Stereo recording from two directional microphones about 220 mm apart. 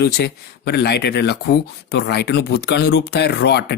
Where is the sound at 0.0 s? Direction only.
50° left (ahead or behind).